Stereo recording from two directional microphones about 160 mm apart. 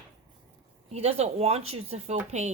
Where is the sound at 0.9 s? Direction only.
40° right (ahead or behind).